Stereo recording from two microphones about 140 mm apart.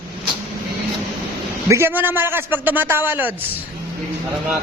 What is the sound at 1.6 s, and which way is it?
A man's voice, 20° right (ahead or behind).